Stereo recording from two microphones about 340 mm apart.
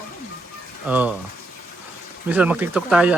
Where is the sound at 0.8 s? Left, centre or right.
Centre.